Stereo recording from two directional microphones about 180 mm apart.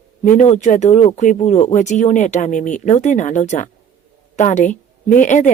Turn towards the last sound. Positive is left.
turn(degrees=45)  # may be behind; listen again after turning